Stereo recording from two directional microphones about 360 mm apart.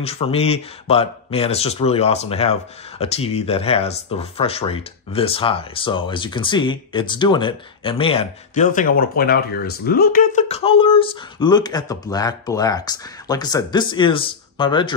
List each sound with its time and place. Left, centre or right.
0.0 s speech: centre